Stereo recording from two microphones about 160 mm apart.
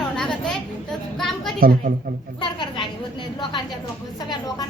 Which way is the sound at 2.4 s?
30° left (ahead or behind).